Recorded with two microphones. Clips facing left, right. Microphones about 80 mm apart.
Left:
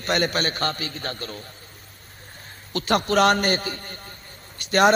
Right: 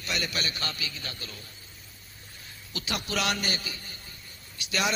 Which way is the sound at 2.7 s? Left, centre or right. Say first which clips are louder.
Left 12 dB; left.